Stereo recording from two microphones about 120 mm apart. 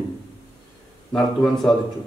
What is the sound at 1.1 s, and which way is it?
Speech, 5° left (ahead or behind).